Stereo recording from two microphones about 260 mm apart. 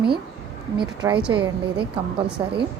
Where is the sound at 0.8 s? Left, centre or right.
Centre.